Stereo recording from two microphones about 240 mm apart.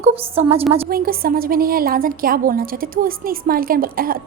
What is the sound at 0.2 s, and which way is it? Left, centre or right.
Speech, right.